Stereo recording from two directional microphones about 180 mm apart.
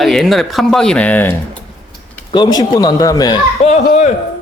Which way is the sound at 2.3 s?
25° left (ahead or behind).